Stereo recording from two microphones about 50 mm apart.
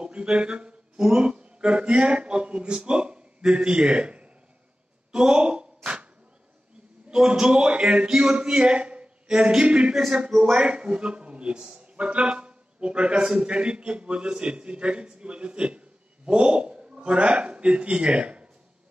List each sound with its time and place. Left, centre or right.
0.0 s speech: centre
5.1 s a sound: centre
7.2 s a man's voice: centre
10.5 s a man's voice: right